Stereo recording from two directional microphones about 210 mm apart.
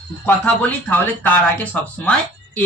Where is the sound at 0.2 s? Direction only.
10° left (ahead or behind).